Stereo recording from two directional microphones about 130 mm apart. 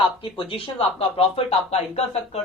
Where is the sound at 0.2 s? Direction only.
40° left (ahead or behind).